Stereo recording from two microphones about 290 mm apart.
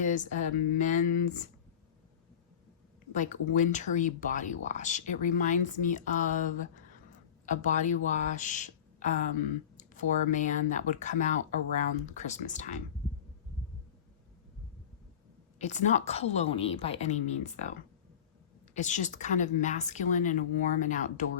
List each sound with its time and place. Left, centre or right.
0.0 s speech: left
3.1 s speech: left
15.5 s speech: left